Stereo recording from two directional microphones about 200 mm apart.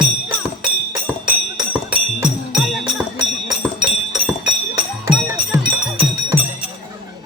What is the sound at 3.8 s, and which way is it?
Music, 25° right (ahead or behind).